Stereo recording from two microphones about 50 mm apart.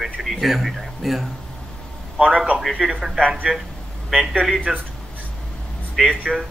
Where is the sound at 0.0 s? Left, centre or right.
Centre.